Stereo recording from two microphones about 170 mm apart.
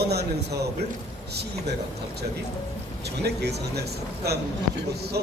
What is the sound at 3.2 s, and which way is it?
A man's voice, 75° right (ahead or behind).